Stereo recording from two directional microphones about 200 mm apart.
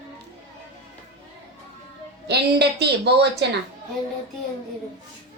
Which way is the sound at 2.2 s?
55° right (ahead or behind).